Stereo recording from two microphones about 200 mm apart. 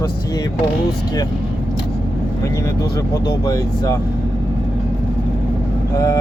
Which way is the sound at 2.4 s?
15° left (ahead or behind).